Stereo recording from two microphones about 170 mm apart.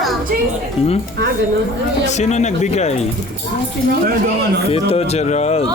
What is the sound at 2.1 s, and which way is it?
Speech, 45° left (ahead or behind).